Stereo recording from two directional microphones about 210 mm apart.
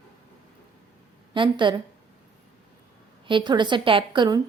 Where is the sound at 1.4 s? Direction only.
20° right (ahead or behind).